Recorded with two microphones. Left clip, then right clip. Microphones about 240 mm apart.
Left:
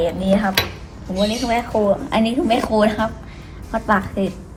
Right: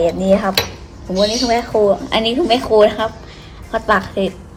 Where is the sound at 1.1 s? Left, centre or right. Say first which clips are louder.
Right 4 dB; right.